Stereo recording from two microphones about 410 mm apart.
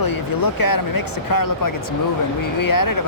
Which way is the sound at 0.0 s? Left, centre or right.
Left.